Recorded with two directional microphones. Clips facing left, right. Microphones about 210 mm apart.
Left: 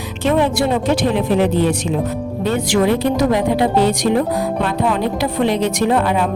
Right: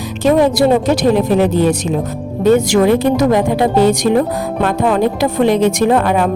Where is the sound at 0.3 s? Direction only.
40° right (ahead or behind).